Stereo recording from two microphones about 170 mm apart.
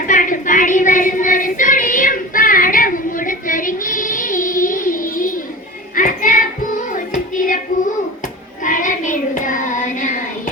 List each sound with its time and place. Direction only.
0.0 s child singing: 50° left (ahead or behind)
5.9 s music: 50° left (ahead or behind)
8.6 s child singing: 50° left (ahead or behind)